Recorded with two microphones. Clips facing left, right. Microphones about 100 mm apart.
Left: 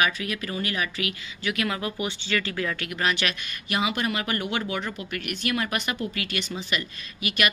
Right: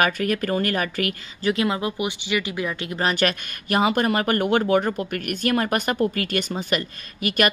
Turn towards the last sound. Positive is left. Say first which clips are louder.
# right 5 dB
turn(degrees=-45)  # may be behind; listen again after turning